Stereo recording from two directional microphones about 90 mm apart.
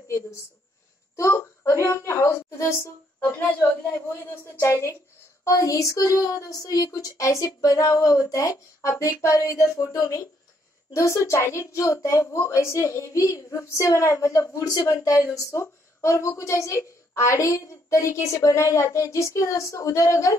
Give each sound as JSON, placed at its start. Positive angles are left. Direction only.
{"t": 1.1, "sound": "a woman's voice", "side_deg": 35}
{"t": 4.6, "sound": "a woman's voice", "side_deg": 30}